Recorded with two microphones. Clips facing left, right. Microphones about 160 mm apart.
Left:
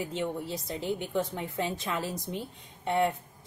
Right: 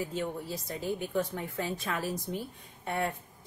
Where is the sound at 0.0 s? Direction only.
25° left (ahead or behind).